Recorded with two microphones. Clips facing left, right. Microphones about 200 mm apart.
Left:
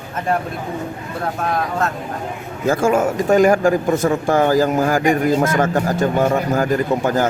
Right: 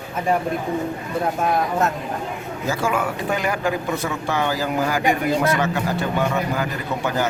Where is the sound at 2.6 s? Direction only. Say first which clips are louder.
Left 7 dB; 50° left (ahead or behind).